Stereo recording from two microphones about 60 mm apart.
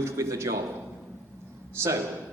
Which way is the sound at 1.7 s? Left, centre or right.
Right.